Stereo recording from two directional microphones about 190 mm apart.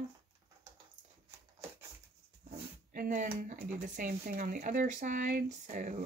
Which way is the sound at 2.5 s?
45° right (ahead or behind).